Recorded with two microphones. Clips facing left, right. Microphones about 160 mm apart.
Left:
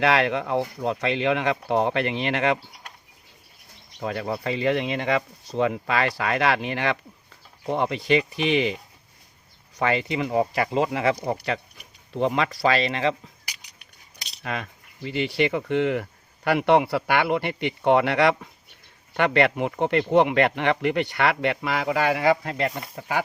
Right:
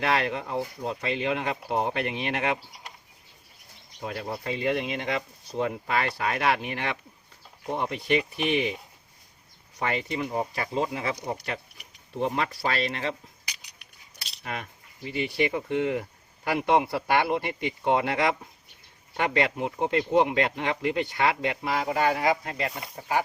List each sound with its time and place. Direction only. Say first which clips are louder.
0.0 s speech: left 5 dB; 90° left
4.0 s speech: left 5 dB; 90° left
14.4 s speech: left 4 dB; 90° left; by 23.2 s 75° left (ahead or behind)